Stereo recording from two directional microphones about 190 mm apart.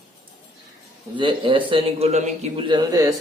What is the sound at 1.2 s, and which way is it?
A man's voice, 25° right (ahead or behind).